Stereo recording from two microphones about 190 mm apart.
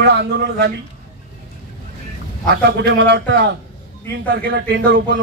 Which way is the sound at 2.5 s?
60° right (ahead or behind).